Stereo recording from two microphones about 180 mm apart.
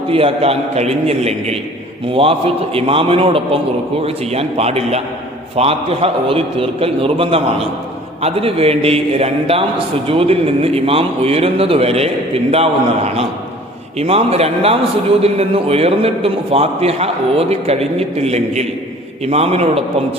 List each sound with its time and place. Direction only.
0.1 s a man's voice: 30° right (ahead or behind)
2.7 s a man's voice: 30° right (ahead or behind)
14.0 s a man's voice: 35° right (ahead or behind)